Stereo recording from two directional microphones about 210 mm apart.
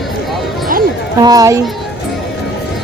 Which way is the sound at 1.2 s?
15° right (ahead or behind).